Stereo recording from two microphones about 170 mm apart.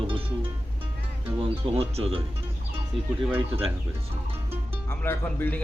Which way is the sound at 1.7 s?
35° right (ahead or behind).